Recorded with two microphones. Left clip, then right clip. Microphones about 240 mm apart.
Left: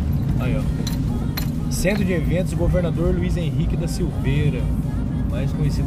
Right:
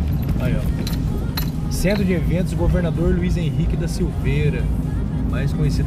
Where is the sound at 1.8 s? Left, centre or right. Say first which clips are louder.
Right 1 dB; centre.